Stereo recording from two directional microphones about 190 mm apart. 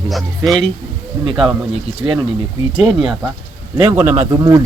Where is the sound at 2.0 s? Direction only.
15° right (ahead or behind).